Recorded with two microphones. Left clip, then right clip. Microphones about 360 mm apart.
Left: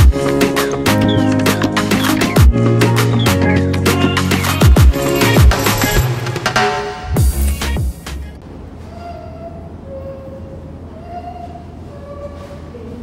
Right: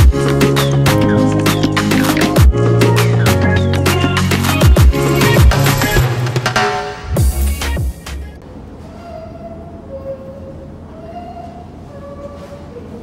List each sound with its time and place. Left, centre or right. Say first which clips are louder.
0.0 s music: even; centre